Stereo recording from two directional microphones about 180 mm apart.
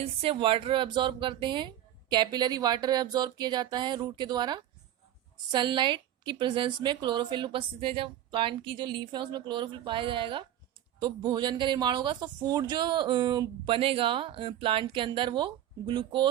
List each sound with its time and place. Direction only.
0.0 s speech: 35° right (ahead or behind)